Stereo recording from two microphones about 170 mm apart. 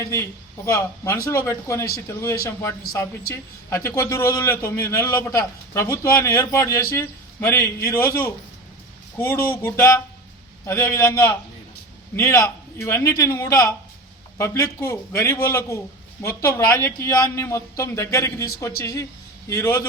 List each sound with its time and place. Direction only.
0.0 s speech: 15° left (ahead or behind)